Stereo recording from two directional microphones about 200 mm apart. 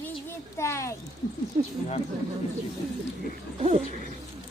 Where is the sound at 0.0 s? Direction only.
10° left (ahead or behind).